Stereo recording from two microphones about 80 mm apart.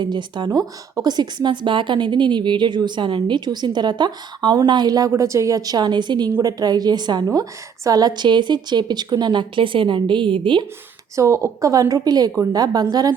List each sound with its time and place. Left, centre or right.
0.0 s a woman's voice: right
6.4 s a woman's voice: right
11.1 s speech: right